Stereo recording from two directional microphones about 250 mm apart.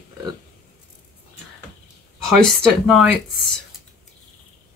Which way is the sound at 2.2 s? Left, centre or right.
Centre.